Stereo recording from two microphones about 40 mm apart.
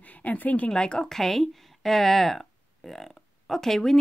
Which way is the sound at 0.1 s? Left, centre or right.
Left.